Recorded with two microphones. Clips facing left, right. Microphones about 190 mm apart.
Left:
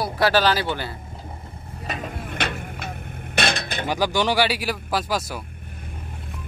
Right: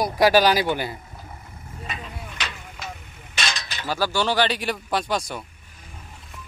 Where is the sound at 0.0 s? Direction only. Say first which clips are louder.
Right 2 dB; 15° right (ahead or behind).